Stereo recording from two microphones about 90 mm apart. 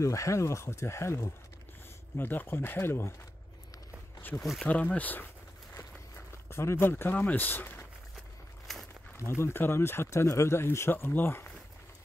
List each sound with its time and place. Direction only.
0.0 s speech: 35° left (ahead or behind)
4.4 s speech: centre (ahead or behind)
4.6 s speech: 15° left (ahead or behind)
5.8 s a sound: 30° left (ahead or behind)
8.7 s walk: centre (ahead or behind)
9.3 s speech: 25° left (ahead or behind)